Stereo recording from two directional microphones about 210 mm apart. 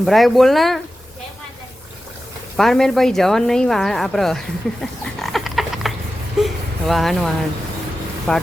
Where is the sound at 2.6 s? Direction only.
Centre (ahead or behind).